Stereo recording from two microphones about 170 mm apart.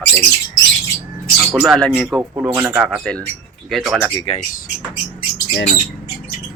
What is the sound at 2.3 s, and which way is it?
Speech, 15° right (ahead or behind).